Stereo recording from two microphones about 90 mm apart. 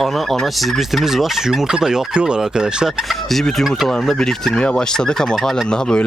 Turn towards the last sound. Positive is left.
turn(degrees=10)  # may be behind; listen again after turning